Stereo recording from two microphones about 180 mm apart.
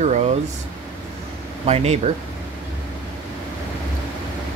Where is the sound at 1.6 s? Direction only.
35° right (ahead or behind).